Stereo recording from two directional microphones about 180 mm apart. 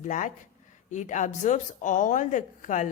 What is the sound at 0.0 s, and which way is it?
A woman's voice, 45° left (ahead or behind).